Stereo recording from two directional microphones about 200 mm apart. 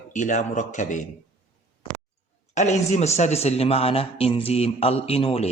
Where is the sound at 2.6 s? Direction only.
35° left (ahead or behind).